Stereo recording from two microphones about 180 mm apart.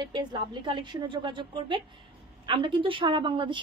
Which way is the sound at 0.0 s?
25° right (ahead or behind).